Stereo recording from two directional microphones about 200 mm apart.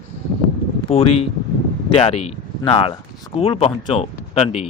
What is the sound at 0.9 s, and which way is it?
A man's voice, 30° left (ahead or behind).